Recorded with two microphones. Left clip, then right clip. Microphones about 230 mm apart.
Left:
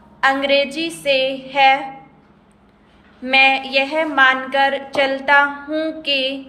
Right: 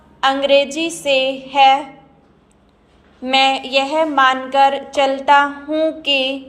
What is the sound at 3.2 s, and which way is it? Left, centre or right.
A woman's voice, centre.